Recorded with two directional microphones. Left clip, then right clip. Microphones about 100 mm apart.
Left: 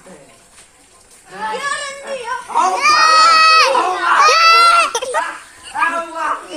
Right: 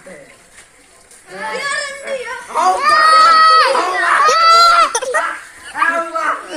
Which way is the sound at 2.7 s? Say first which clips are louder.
Right 1 dB; 15° right (ahead or behind).